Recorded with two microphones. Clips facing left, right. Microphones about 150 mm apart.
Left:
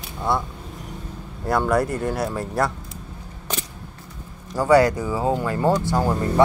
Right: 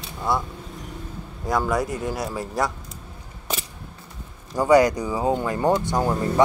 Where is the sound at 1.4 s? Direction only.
Centre (ahead or behind).